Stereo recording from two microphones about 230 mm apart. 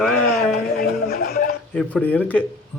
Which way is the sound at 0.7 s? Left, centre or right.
Left.